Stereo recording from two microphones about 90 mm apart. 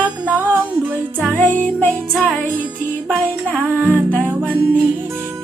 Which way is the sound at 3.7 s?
20° right (ahead or behind).